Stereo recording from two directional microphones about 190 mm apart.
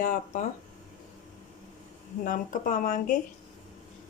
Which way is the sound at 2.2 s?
45° left (ahead or behind).